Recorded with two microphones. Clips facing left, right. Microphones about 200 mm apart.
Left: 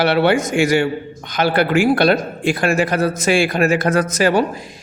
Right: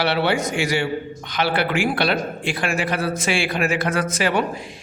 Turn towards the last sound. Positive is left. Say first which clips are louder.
# left 5 dB
turn(degrees=40)  # may be behind; listen again after turning